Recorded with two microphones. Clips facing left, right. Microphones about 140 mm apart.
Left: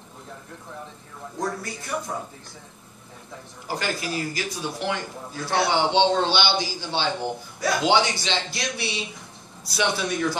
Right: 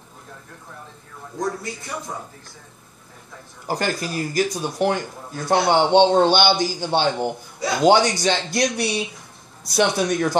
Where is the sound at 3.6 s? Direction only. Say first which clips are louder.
Right 4 dB; 45° right (ahead or behind).